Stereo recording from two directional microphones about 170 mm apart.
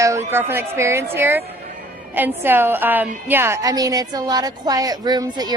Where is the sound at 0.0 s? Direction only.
15° right (ahead or behind).